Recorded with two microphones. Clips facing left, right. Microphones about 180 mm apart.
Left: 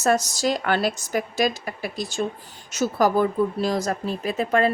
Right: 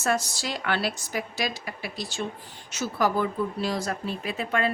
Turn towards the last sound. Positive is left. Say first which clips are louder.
# left 6 dB
turn(degrees=40)  # may be behind; listen again after turning